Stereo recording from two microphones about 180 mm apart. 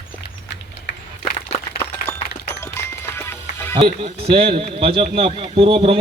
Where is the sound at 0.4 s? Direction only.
70° left (ahead or behind).